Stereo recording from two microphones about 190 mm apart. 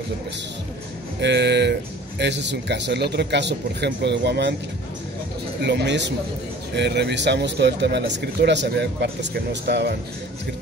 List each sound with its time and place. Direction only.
1.2 s speech: 65° right (ahead or behind)
5.6 s speech: 60° right (ahead or behind)